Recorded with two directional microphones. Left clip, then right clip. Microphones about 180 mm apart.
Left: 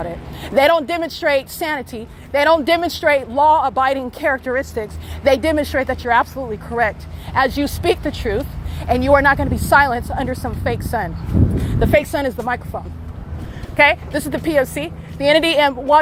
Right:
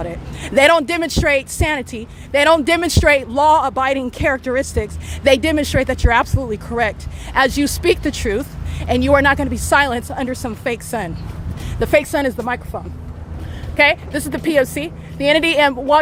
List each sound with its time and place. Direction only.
0.0 s a woman's voice: 20° right (ahead or behind)
1.3 s a woman's voice: 15° right (ahead or behind)
8.3 s a woman's voice: 20° right (ahead or behind)
14.5 s a woman's voice: 30° right (ahead or behind)
15.3 s a woman's voice: 10° right (ahead or behind)
15.9 s a woman's voice: 30° right (ahead or behind)